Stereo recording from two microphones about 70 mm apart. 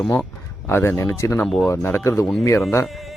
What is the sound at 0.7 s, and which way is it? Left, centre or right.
Speech, left.